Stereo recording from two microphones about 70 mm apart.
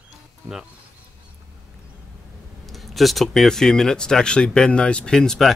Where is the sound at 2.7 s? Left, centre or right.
Centre.